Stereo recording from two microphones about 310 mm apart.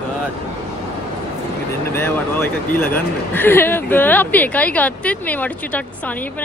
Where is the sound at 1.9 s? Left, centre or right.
Centre.